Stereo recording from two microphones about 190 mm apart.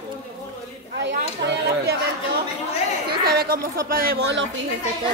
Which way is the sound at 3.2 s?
50° right (ahead or behind).